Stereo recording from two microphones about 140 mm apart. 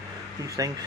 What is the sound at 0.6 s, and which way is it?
Speech, 25° right (ahead or behind).